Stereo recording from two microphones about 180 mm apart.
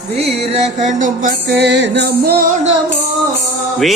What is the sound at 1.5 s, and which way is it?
Music, 70° right (ahead or behind).